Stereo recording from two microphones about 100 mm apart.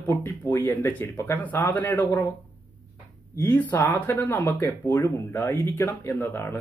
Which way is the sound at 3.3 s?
20° left (ahead or behind).